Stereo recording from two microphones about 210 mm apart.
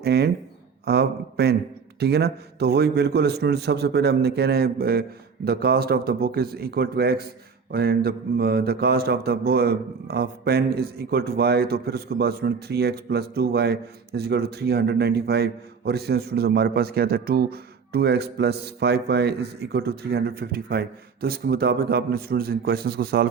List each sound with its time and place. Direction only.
0.0 s speech: 50° right (ahead or behind)